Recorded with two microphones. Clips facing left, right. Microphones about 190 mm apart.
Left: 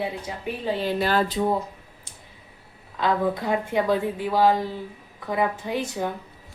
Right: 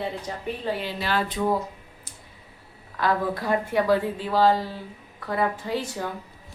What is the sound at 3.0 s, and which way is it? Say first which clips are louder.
A woman's voice: left 1 dB; 20° left (ahead or behind).